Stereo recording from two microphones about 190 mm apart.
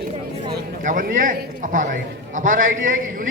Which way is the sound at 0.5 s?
45° right (ahead or behind).